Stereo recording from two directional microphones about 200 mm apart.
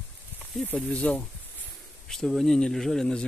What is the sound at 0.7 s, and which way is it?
Speech, 5° left (ahead or behind).